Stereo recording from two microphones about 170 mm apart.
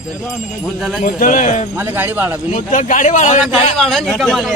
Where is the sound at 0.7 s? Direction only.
Centre (ahead or behind).